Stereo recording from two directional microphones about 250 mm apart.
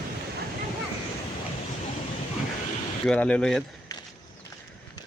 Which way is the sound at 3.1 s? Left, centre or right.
Centre.